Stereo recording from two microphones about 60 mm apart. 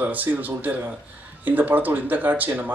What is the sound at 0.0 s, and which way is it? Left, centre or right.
Speech, right.